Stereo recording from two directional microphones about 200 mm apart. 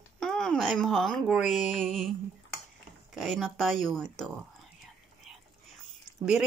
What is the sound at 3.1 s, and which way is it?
Speech, centre (ahead or behind).